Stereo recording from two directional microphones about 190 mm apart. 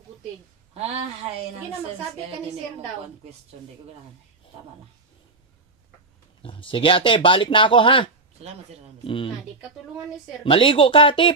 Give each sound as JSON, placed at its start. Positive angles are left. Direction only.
{"t": 0.7, "sound": "a woman's voice", "side_deg": -35}
{"t": 6.4, "sound": "speech", "side_deg": 25}
{"t": 10.4, "sound": "speech", "side_deg": 25}